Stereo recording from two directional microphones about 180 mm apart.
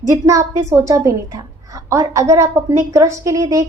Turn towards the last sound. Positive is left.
turn(degrees=-20)  # may be behind; listen again after turning